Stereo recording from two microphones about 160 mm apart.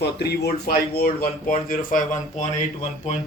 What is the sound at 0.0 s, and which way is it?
A man's voice, 90° left.